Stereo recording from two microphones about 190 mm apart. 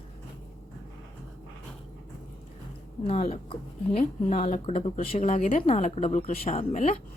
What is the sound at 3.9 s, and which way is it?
Speech, 35° left (ahead or behind).